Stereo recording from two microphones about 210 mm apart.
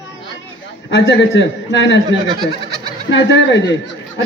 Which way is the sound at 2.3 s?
20° right (ahead or behind).